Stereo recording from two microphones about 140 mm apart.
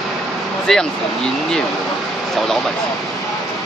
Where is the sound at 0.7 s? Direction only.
5° left (ahead or behind).